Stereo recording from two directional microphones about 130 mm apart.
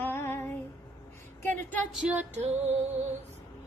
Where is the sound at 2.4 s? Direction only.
60° right (ahead or behind).